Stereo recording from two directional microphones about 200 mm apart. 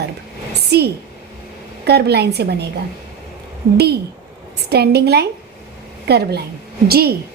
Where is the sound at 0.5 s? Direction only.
55° right (ahead or behind).